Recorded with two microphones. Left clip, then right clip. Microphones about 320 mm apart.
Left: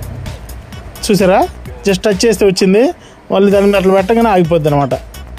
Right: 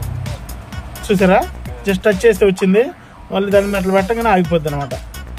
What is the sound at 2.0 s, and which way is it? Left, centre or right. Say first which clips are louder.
Speech: right 1 dB; centre.